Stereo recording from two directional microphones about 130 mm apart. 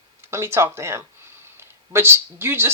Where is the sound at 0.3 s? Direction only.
20° right (ahead or behind).